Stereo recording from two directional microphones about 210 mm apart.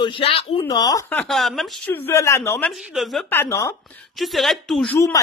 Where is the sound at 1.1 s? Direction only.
5° left (ahead or behind).